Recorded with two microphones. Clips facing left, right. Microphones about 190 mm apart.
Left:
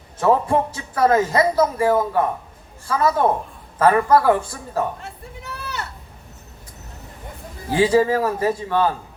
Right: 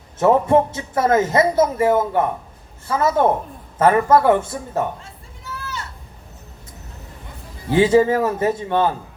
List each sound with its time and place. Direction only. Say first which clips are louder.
0.2 s speech: right 3 dB; 25° right (ahead or behind)
4.9 s a sound: left 5 dB; 65° left (ahead or behind)
7.7 s speech: right 2 dB; 25° right (ahead or behind)